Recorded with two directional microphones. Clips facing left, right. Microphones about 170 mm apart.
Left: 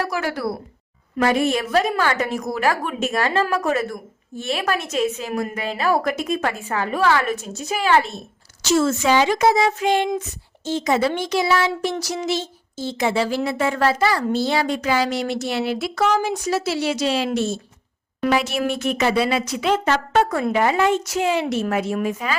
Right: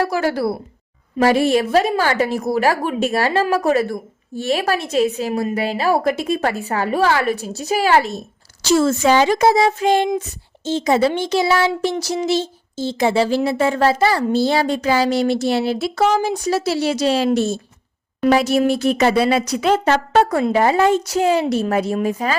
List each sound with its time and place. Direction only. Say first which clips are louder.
0.0 s a woman's voice: right 5 dB; 30° right (ahead or behind)